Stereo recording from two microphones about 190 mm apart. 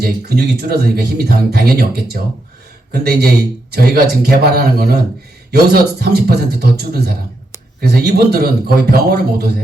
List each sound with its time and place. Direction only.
0.0 s speech: 55° right (ahead or behind)
2.9 s speech: 55° right (ahead or behind)